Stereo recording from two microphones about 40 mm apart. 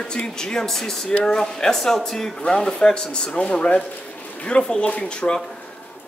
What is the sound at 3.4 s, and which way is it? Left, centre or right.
Speech, left.